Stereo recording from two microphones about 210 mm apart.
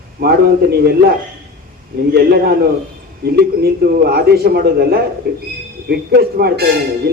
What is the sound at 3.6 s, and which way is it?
A man's voice, 50° right (ahead or behind).